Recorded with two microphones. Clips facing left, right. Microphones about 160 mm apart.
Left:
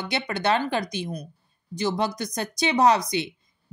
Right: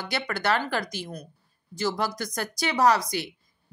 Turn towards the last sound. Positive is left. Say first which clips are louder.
# left 2 dB
turn(degrees=20)  # may be behind; listen again after turning